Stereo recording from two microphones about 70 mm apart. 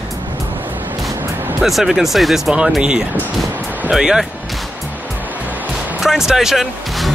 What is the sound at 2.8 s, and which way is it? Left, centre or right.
Speech, centre.